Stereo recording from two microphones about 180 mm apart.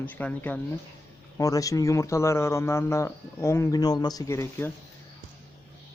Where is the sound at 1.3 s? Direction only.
20° left (ahead or behind).